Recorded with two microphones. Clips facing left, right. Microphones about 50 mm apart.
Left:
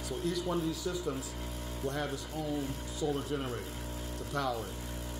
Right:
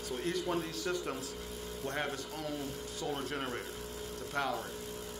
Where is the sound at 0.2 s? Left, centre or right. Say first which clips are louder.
Left 1 dB; right.